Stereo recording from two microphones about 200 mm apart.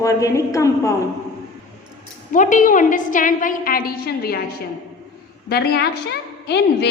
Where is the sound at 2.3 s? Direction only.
40° left (ahead or behind).